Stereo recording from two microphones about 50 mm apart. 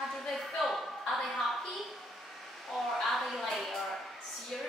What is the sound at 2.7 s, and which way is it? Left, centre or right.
A woman's voice, centre.